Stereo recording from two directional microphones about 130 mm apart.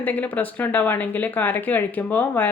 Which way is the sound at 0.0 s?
15° left (ahead or behind).